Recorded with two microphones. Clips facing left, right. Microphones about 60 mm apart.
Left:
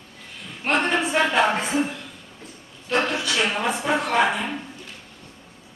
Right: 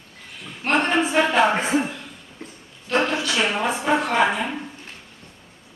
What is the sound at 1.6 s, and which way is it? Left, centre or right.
Speech, right.